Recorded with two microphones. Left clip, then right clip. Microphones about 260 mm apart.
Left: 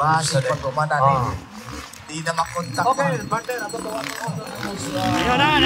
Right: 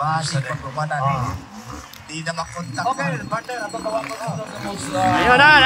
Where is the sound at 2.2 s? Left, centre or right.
Centre.